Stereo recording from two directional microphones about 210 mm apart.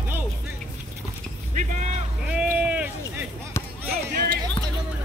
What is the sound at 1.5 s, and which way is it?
Vehicle, 35° right (ahead or behind).